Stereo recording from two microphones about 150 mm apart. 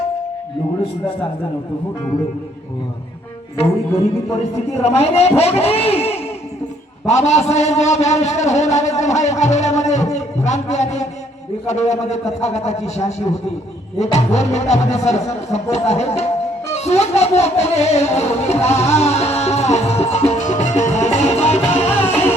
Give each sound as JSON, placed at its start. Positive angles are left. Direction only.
{"t": 4.7, "sound": "a man's voice", "side_deg": 45}
{"t": 16.6, "sound": "music", "side_deg": 45}